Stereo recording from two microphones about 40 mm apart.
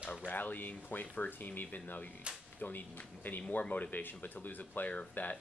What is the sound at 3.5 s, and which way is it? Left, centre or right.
Speech, left.